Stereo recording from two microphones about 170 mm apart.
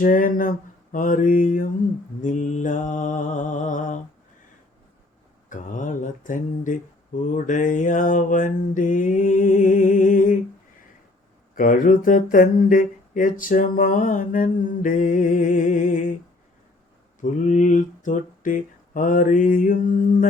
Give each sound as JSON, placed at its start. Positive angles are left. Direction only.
{"t": 0.0, "sound": "speech", "side_deg": 55}
{"t": 5.5, "sound": "speech", "side_deg": 50}
{"t": 11.5, "sound": "speech", "side_deg": 50}
{"t": 17.2, "sound": "speech", "side_deg": 50}